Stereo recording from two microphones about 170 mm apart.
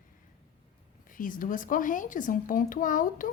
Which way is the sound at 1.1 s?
55° left (ahead or behind).